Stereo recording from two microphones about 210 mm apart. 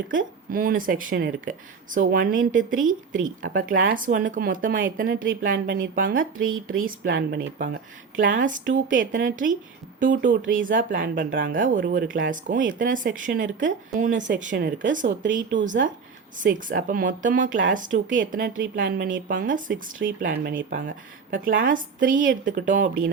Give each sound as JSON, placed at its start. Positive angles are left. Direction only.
{"t": 0.1, "sound": "speech", "side_deg": -40}